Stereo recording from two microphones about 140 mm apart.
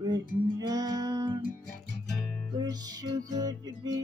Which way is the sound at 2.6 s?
30° right (ahead or behind).